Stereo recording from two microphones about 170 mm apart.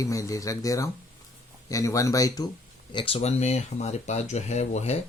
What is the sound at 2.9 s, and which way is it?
Speech, 30° left (ahead or behind).